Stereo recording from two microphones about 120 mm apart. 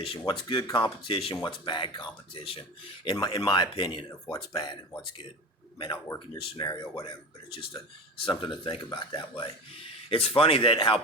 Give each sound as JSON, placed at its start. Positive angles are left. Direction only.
{"t": 0.0, "sound": "speech", "side_deg": 45}
{"t": 3.0, "sound": "speech", "side_deg": 40}
{"t": 6.3, "sound": "speech", "side_deg": 35}
{"t": 8.2, "sound": "speech", "side_deg": 45}